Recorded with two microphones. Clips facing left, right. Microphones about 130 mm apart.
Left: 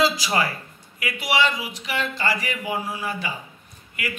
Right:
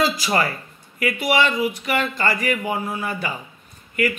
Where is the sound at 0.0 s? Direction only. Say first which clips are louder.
Right 1 dB; 50° right (ahead or behind).